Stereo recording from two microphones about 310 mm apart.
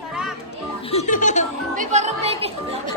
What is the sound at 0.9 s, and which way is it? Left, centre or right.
Music, left.